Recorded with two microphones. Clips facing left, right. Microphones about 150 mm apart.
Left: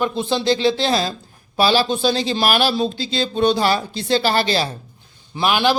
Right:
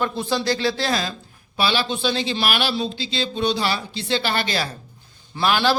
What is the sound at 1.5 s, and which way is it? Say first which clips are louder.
Speech: left 6 dB; 40° left (ahead or behind).